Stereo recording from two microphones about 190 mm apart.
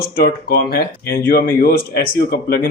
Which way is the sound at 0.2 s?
55° left (ahead or behind).